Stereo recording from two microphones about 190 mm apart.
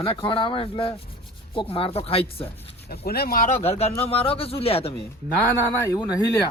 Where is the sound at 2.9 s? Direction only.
55° left (ahead or behind); by 5.0 s 30° left (ahead or behind).